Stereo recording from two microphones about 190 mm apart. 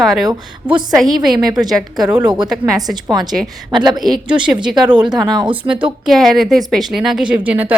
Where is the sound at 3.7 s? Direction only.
25° right (ahead or behind).